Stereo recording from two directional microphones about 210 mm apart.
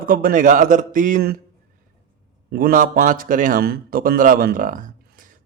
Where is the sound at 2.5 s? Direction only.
40° right (ahead or behind).